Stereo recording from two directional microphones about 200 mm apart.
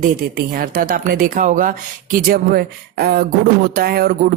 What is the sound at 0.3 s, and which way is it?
Speech, 45° right (ahead or behind).